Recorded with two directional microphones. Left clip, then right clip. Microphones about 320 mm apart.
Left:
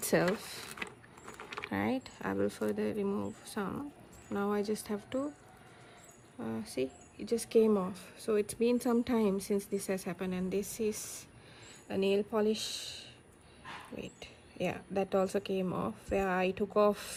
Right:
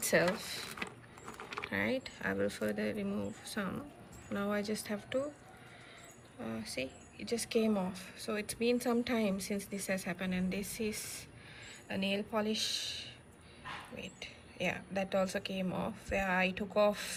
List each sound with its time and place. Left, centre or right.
0.0 s speech: centre
0.8 s keys jangling: centre
1.7 s speech: centre
6.4 s speech: centre
12.1 s speech: centre